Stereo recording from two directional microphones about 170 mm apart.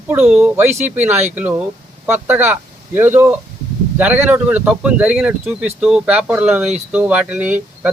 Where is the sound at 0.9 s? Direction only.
10° right (ahead or behind).